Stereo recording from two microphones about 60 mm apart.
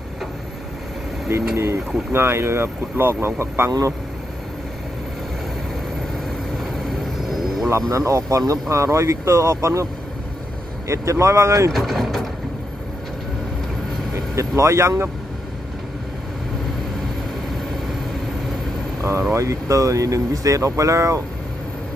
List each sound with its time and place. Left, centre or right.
1.3 s speech: right
6.6 s vehicle: centre
7.7 s speech: right
10.9 s speech: right
11.7 s speech: centre
14.1 s speech: right
19.3 s speech: right